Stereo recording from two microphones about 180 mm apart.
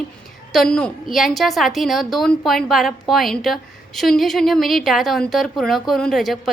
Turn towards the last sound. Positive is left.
turn(degrees=0)  # may be behind; listen again after turning